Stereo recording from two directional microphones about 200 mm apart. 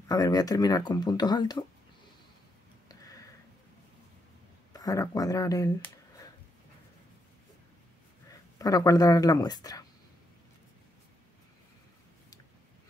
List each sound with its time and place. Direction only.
0.1 s speech: 20° left (ahead or behind)
2.9 s a sound: 15° left (ahead or behind)
4.7 s speech: 15° left (ahead or behind)
8.3 s speech: 15° left (ahead or behind)